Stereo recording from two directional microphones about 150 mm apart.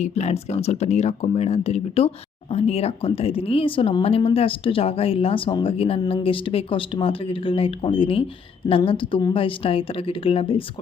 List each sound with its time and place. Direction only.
0.0 s speech: 45° left (ahead or behind)